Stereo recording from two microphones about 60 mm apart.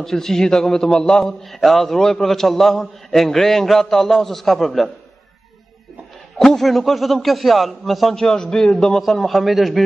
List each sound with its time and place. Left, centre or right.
0.0 s a man's voice: centre
6.3 s a man's voice: centre